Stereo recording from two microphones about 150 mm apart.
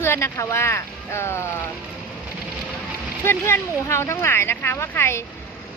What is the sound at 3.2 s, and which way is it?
Speech, 15° left (ahead or behind).